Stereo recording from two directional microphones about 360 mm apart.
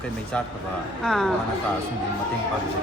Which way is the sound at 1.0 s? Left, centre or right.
Centre.